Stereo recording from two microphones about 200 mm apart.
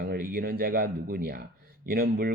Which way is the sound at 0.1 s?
50° right (ahead or behind).